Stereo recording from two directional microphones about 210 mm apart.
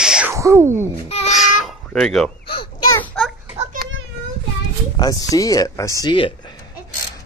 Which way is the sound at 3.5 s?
35° right (ahead or behind).